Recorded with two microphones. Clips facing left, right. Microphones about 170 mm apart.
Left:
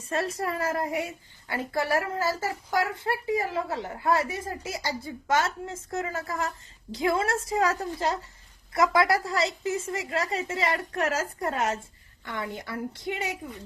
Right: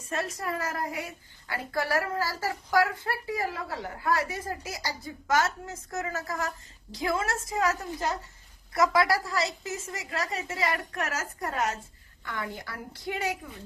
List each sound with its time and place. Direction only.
0.1 s a child's voice: 30° left (ahead or behind)